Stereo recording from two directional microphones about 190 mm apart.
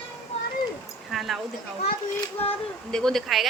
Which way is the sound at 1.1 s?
Centre (ahead or behind).